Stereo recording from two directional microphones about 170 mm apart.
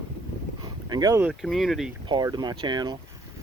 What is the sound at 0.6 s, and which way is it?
Boat, 25° right (ahead or behind).